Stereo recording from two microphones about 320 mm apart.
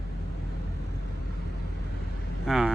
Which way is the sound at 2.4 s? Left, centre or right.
Centre.